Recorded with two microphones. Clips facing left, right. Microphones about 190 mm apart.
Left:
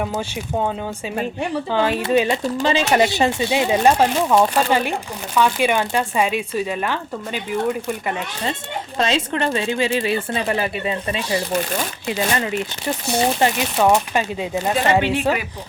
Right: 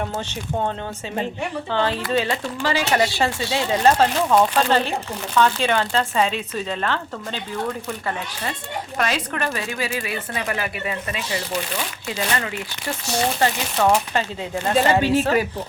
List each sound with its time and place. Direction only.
1.7 s speech: 15° left (ahead or behind)
2.0 s speech: 25° left (ahead or behind)